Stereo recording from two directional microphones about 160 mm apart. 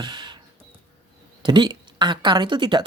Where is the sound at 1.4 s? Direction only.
30° right (ahead or behind).